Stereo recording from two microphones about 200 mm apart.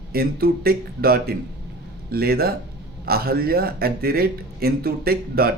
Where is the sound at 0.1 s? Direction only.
50° right (ahead or behind).